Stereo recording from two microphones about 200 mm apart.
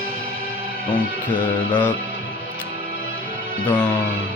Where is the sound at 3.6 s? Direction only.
10° left (ahead or behind).